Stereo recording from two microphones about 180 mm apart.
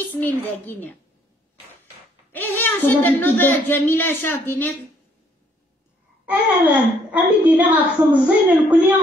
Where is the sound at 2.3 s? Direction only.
10° left (ahead or behind).